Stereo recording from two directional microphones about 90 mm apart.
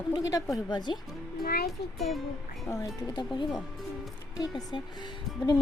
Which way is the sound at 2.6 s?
35° left (ahead or behind).